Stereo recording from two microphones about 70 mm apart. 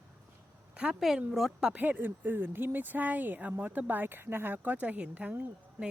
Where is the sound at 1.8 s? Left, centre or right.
Right.